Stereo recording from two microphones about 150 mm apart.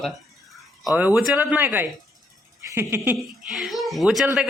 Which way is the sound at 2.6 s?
15° right (ahead or behind).